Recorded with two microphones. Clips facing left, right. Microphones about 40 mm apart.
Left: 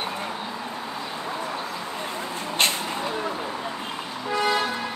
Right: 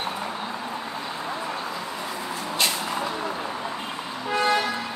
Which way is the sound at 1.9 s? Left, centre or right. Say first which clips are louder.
Even; left.